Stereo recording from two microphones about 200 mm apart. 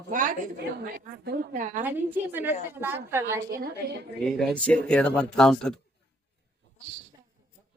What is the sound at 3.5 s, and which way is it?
Speech, 45° right (ahead or behind).